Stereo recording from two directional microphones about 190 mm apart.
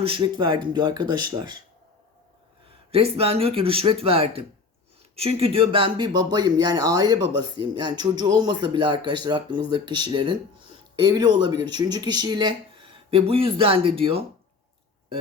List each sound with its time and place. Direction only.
0.0 s speech: 25° right (ahead or behind)
2.9 s speech: 30° right (ahead or behind)